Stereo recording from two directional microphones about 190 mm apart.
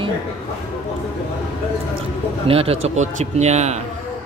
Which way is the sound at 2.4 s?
30° right (ahead or behind).